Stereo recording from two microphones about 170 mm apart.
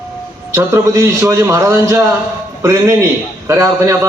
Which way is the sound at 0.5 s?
15° right (ahead or behind).